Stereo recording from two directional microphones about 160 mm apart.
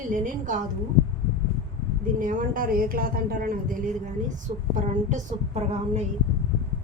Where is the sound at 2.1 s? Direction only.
60° right (ahead or behind).